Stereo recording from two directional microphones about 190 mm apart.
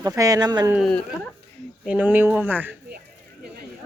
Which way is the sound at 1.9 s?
10° right (ahead or behind).